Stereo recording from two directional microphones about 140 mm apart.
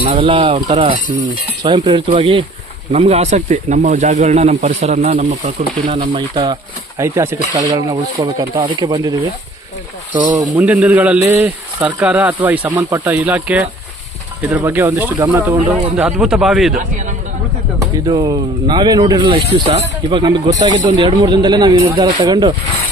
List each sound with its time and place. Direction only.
0.0 s speech: 40° right (ahead or behind)
2.9 s speech: 50° right (ahead or behind); by 7.0 s 30° right (ahead or behind)
7.0 s speech: 20° right (ahead or behind)
10.2 s speech: 25° right (ahead or behind)
10.5 s a man's voice: 10° right (ahead or behind)
12.6 s speech: 25° right (ahead or behind)
13.1 s a man's voice: 10° right (ahead or behind)
16.7 s a man's voice: 60° right (ahead or behind)
17.7 s speech: 30° right (ahead or behind)